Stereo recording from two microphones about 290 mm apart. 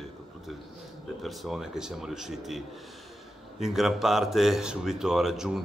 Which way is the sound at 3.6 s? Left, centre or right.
Centre.